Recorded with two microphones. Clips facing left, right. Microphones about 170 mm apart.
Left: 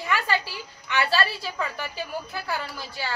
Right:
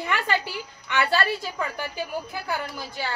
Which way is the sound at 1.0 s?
15° right (ahead or behind).